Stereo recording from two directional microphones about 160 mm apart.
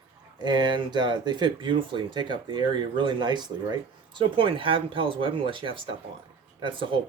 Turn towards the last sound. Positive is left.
turn(degrees=-30)  # may be behind; listen again after turning